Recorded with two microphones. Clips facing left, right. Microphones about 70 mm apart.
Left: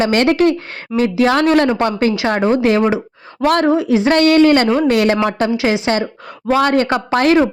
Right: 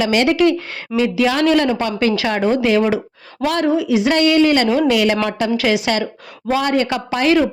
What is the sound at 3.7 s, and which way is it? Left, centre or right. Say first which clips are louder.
A woman's voice: left 2 dB; left.